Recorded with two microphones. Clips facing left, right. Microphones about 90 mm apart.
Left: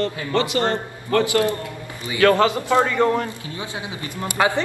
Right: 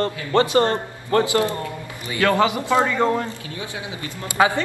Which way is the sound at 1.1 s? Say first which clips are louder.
Even; 25° right (ahead or behind).